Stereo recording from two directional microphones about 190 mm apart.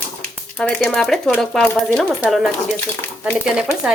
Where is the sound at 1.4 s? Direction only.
5° left (ahead or behind).